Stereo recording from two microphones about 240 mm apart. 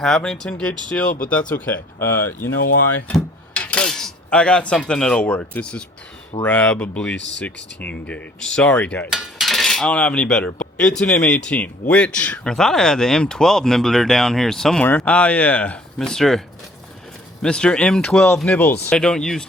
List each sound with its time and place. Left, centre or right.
0.0 s speech: centre
1.0 s speech: left
1.3 s speech: centre
2.4 s speech: left
3.1 s cutlery: centre
6.4 s speech: centre
17.4 s speech: centre